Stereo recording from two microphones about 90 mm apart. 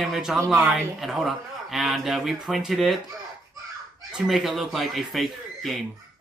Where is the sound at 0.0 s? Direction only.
Centre (ahead or behind).